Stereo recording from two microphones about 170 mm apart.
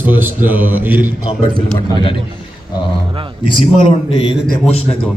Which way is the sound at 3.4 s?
30° left (ahead or behind).